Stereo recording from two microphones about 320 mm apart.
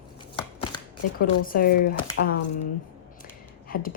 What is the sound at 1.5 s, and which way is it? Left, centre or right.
Speech, left.